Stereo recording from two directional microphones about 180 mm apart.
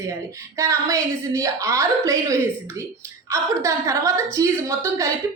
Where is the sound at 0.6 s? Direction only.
15° right (ahead or behind).